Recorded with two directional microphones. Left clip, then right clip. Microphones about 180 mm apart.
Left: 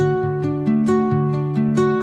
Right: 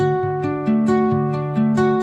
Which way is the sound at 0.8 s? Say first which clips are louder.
Right 1 dB; 30° left (ahead or behind).